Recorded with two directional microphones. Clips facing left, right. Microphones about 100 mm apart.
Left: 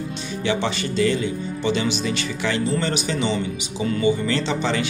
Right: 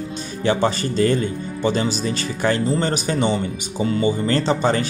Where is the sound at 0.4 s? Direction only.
40° right (ahead or behind).